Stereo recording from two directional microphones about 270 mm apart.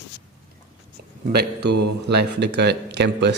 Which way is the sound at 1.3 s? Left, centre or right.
Right.